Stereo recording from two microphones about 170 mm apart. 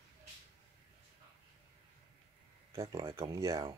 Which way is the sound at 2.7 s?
20° right (ahead or behind).